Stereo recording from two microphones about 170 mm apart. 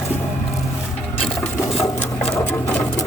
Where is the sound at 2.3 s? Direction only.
10° left (ahead or behind).